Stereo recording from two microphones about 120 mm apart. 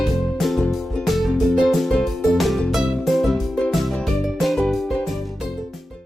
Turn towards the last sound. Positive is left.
turn(degrees=0)  # may be behind; listen again after turning